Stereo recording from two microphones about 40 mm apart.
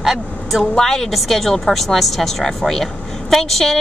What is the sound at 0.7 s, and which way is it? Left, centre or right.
A woman's voice, centre.